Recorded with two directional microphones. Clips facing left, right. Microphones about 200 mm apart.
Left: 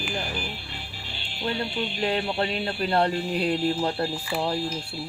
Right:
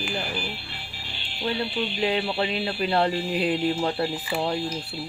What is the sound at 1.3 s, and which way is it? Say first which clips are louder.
Speech: right 1 dB; 45° left (ahead or behind).